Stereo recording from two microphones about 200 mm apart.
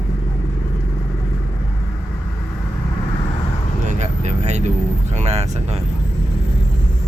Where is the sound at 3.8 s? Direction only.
35° right (ahead or behind).